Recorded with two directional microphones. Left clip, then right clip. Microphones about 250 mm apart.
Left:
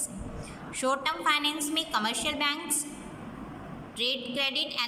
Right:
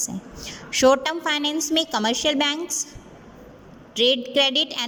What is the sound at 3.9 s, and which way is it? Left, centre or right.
Speech, right.